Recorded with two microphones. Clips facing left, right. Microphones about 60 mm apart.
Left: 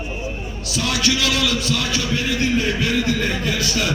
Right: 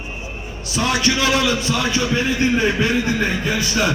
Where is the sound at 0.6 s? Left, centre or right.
Right.